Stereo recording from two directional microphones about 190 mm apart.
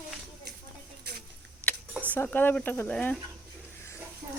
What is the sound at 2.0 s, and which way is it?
Speech, 10° left (ahead or behind).